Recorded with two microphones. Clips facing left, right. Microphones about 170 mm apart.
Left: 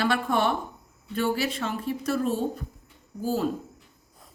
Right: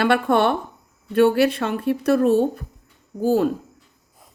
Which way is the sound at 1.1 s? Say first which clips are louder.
Right 10 dB; 65° right (ahead or behind).